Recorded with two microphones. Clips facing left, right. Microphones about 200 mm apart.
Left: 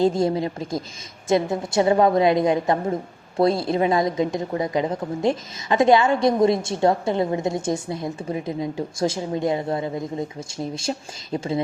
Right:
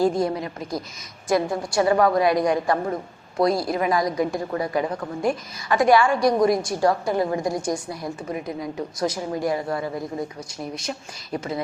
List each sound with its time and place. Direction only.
0.0 s a woman's voice: 25° left (ahead or behind)